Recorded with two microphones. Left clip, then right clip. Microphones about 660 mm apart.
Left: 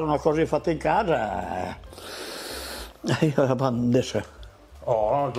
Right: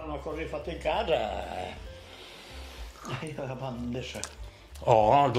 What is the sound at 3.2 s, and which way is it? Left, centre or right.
Speech, left.